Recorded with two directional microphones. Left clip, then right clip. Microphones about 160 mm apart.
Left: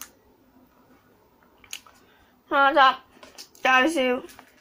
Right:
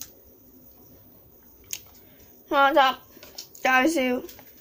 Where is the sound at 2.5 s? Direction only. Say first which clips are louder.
Left 1 dB; 15° right (ahead or behind).